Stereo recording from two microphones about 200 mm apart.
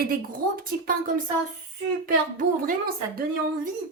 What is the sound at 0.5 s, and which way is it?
Speech, 45° right (ahead or behind).